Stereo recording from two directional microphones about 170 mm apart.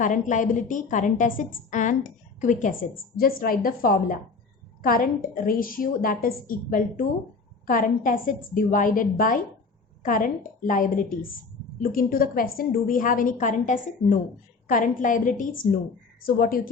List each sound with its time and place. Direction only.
0.0 s a woman's voice: 50° left (ahead or behind)